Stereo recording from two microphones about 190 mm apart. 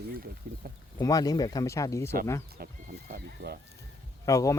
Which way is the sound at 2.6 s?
50° right (ahead or behind).